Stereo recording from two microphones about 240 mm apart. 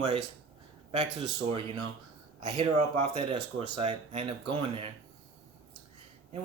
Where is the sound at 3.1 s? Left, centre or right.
Centre.